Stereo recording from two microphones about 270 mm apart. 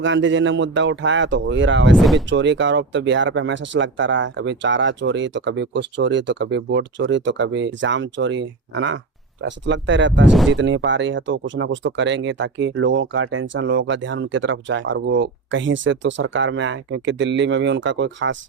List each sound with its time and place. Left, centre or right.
0.0 s speech: right
10.3 s speech: centre
10.6 s speech: right